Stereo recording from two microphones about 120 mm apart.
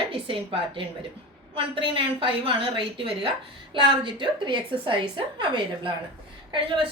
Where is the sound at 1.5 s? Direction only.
45° right (ahead or behind).